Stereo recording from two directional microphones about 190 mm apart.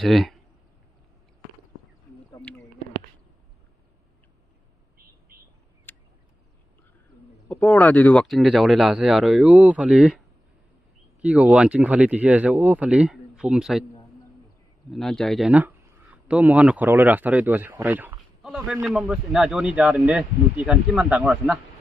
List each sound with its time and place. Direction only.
0.0 s speech: centre (ahead or behind)
4.9 s bird: 50° right (ahead or behind)
5.9 s a sound: 10° left (ahead or behind)
7.4 s speech: 10° left (ahead or behind)
14.9 s speech: centre (ahead or behind)